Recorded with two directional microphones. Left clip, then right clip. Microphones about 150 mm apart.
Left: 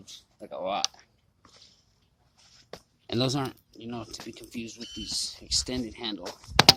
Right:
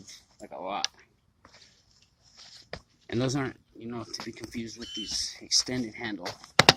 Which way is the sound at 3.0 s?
20° left (ahead or behind).